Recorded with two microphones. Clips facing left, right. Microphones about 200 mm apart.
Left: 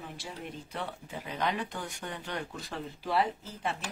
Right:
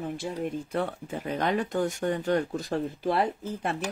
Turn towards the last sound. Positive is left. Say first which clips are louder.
# right 5 dB
turn(degrees=-55)  # may be behind; listen again after turning